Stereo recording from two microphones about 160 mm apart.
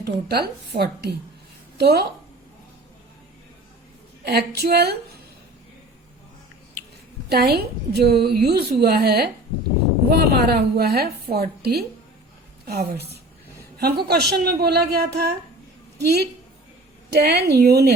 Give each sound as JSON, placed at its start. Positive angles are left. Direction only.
{"t": 0.0, "sound": "a woman's voice", "side_deg": -80}
{"t": 4.2, "sound": "a woman's voice", "side_deg": -85}
{"t": 7.3, "sound": "a woman's voice", "side_deg": -80}
{"t": 12.6, "sound": "a woman's voice", "side_deg": -70}
{"t": 13.8, "sound": "a woman's voice", "side_deg": -85}
{"t": 16.0, "sound": "a woman's voice", "side_deg": -90}